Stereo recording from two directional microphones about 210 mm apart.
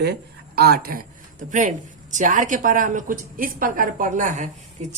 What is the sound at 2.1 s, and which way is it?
A woman's voice, 40° right (ahead or behind).